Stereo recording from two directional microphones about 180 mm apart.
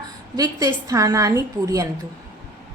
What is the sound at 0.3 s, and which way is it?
A woman's voice, 20° right (ahead or behind).